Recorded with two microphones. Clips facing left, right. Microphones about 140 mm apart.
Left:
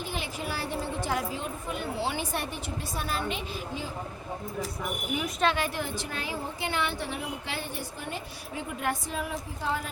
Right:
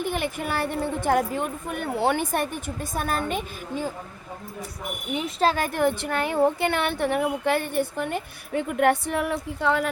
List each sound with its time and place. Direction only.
0.0 s a woman's voice: 55° right (ahead or behind)
5.1 s a woman's voice: 30° right (ahead or behind); by 9.9 s 70° right (ahead or behind)